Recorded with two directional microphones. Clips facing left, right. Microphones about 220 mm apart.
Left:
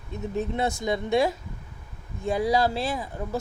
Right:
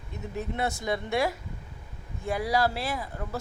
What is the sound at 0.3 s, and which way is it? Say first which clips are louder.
Speech: left 4 dB; 20° left (ahead or behind).